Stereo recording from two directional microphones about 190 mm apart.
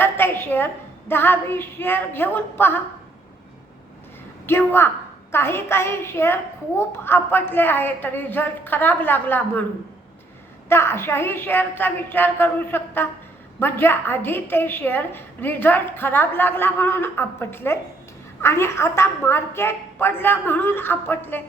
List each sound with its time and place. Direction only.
0.0 s a woman's voice: 10° left (ahead or behind)
4.4 s a child's voice: 10° left (ahead or behind)
10.7 s a child's voice: 15° left (ahead or behind)